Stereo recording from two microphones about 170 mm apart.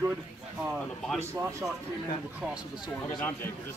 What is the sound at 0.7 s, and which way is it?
Speech, 5° left (ahead or behind).